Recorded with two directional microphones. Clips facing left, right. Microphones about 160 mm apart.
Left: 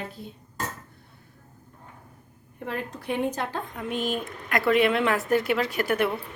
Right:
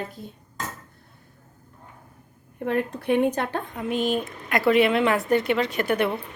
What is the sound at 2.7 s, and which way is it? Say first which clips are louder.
Speech: right 7 dB; 60° right (ahead or behind).